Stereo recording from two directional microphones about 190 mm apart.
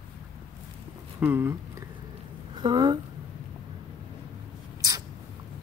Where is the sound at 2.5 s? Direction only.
25° right (ahead or behind).